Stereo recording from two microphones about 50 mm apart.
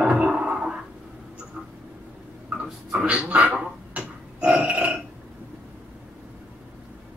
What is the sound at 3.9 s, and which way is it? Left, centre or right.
Burping, right.